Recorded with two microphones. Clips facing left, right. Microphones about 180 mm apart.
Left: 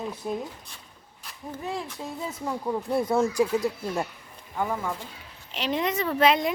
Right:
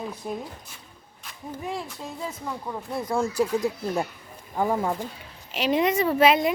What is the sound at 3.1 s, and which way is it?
Speech, 15° left (ahead or behind).